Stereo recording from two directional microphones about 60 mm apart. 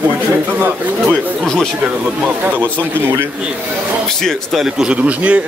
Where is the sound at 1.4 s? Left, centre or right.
Centre.